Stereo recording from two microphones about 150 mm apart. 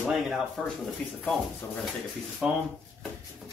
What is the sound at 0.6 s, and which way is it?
Speech, centre (ahead or behind).